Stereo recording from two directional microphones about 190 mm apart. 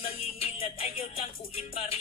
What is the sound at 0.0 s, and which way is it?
Music, 30° left (ahead or behind).